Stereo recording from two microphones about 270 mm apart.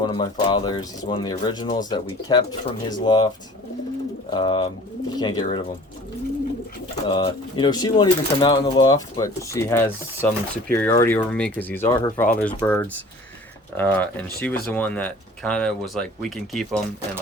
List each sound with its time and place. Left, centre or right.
0.0 s speech: centre
4.3 s speech: centre
7.1 s speech: centre